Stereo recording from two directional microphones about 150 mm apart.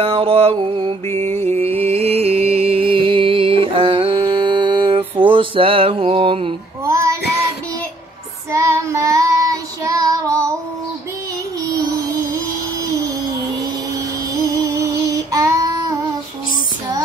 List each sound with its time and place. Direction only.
0.0 s mantra: 40° right (ahead or behind)
1.1 s music: 45° right (ahead or behind)
6.8 s child singing: 20° right (ahead or behind)
8.5 s child singing: 20° right (ahead or behind)
11.7 s music: 25° right (ahead or behind)
14.4 s female singing: 20° right (ahead or behind)